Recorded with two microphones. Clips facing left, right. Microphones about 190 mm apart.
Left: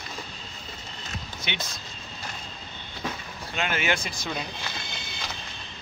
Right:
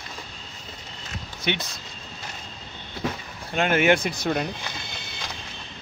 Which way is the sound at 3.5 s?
50° right (ahead or behind).